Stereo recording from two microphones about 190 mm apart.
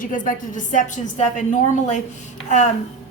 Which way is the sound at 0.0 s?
45° left (ahead or behind).